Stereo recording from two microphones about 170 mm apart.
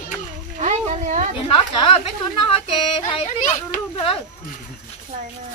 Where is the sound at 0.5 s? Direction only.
40° right (ahead or behind).